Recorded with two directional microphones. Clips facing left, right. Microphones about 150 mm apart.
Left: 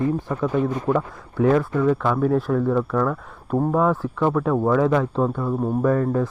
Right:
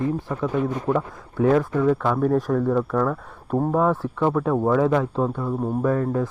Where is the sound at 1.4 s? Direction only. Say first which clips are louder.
Even; 35° right (ahead or behind).